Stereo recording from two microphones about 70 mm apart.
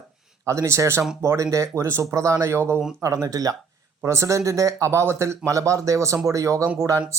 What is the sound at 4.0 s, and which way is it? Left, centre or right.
Speech, right.